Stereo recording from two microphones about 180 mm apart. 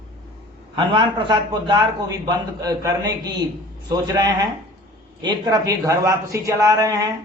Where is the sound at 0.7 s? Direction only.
25° right (ahead or behind).